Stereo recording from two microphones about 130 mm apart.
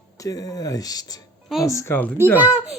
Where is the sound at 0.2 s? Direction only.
25° left (ahead or behind).